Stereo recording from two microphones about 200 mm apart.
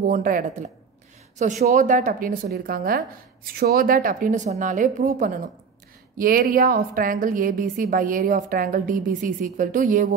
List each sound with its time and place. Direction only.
0.1 s a woman's voice: 45° right (ahead or behind)